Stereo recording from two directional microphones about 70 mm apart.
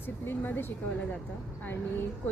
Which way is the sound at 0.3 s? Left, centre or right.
Left.